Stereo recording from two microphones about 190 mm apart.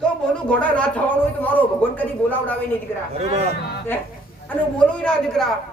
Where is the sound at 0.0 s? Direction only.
5° left (ahead or behind).